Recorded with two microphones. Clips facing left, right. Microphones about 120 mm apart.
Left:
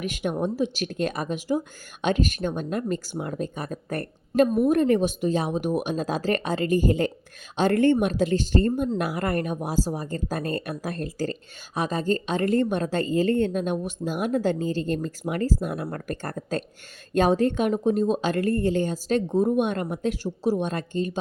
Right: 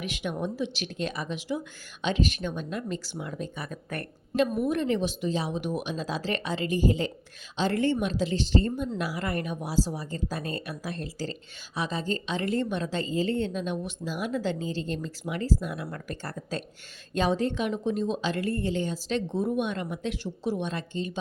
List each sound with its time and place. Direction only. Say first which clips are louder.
0.0 s speech: left 5 dB; 45° left (ahead or behind)
4.7 s speech: left 6 dB; 45° left (ahead or behind)